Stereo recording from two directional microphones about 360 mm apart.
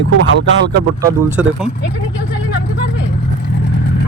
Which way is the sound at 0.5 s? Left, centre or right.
Right.